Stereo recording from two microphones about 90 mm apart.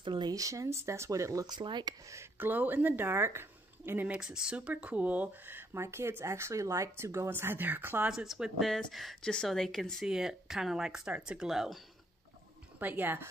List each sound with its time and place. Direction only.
0.0 s speech: 60° right (ahead or behind)
0.3 s speech: 40° right (ahead or behind)
1.6 s speech: 60° right (ahead or behind)
2.3 s speech: 20° right (ahead or behind)
4.2 s speech: 10° right (ahead or behind)
8.1 s speech: 5° right (ahead or behind)
12.7 s speech: 20° right (ahead or behind)